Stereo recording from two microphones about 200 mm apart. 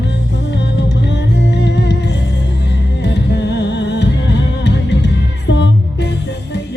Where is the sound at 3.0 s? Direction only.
60° left (ahead or behind).